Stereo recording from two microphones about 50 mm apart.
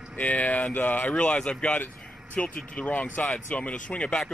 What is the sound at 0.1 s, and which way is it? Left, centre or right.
Speech, left.